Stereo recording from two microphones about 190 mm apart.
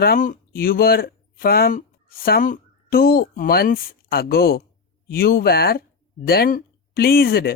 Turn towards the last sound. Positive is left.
turn(degrees=55)  # may be behind; listen again after turning